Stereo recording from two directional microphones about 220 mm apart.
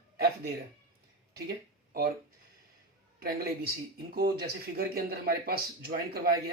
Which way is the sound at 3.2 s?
45° right (ahead or behind).